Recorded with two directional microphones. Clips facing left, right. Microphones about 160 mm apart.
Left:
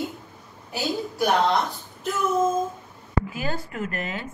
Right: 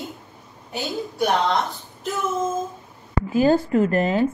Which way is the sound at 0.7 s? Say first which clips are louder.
Even; centre (ahead or behind).